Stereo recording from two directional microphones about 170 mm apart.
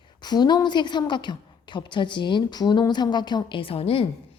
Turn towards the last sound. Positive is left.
turn(degrees=35)  # may be behind; listen again after turning